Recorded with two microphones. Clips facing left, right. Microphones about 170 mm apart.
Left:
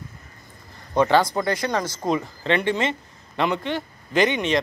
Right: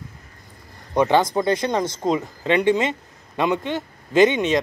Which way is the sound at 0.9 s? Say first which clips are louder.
Right 1 dB; 20° right (ahead or behind).